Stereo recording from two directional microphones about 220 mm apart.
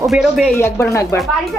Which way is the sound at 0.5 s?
10° left (ahead or behind).